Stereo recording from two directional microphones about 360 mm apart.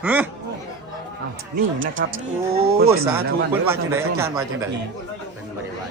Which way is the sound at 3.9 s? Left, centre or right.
Centre.